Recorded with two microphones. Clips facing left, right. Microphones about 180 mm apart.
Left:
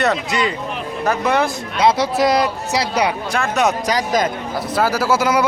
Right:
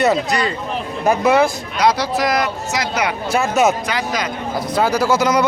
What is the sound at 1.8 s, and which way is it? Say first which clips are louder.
Speech: left 2 dB; 25° left (ahead or behind).